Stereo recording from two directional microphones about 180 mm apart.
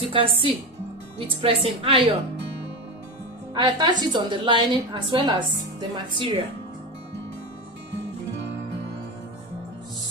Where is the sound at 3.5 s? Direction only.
25° right (ahead or behind).